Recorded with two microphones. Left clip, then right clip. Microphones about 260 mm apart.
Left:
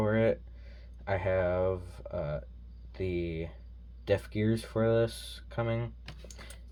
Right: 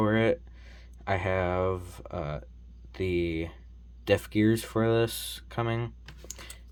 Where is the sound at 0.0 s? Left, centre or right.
Right.